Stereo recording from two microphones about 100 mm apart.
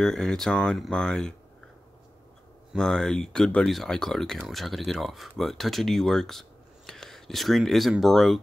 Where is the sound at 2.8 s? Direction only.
5° left (ahead or behind).